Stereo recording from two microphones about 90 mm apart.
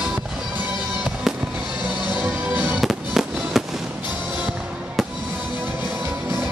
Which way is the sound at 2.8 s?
5° right (ahead or behind).